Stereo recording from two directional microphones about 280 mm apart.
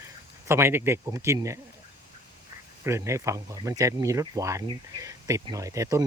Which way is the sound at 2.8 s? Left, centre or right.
Centre.